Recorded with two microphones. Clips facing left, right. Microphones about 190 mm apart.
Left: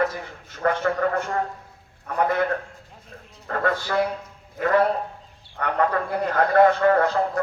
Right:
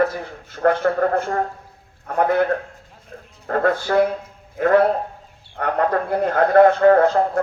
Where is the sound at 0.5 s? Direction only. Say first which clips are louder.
Right 5 dB; 45° right (ahead or behind).